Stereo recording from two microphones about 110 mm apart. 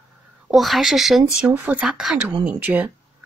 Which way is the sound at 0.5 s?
Centre (ahead or behind).